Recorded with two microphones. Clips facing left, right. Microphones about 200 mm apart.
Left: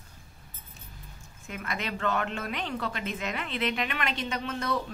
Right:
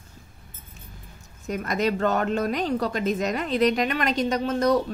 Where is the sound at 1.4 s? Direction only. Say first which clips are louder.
Right 11 dB; 40° right (ahead or behind).